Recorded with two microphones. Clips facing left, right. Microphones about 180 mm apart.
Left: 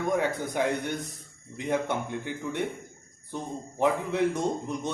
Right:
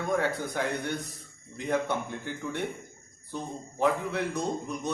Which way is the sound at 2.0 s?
15° left (ahead or behind).